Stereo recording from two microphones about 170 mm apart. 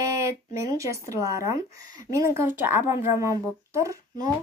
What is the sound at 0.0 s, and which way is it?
A child's voice, 15° right (ahead or behind).